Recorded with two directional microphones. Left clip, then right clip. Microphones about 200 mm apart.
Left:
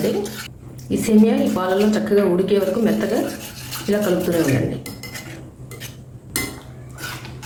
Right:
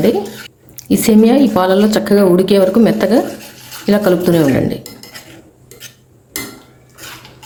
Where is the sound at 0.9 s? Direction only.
55° right (ahead or behind).